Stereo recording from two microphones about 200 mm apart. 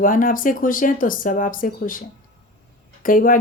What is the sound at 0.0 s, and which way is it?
Speech, 45° left (ahead or behind).